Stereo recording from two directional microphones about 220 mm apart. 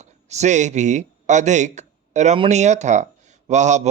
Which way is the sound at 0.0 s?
30° right (ahead or behind).